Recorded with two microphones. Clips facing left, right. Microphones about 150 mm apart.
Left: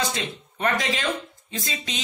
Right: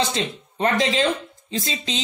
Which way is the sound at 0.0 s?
30° right (ahead or behind).